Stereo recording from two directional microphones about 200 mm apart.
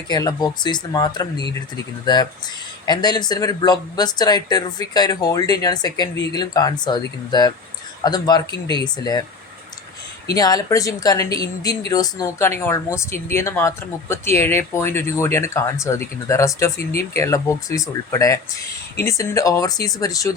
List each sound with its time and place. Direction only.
0.1 s speech: 20° left (ahead or behind)
2.8 s speech: 20° left (ahead or behind)
10.3 s speech: 20° left (ahead or behind)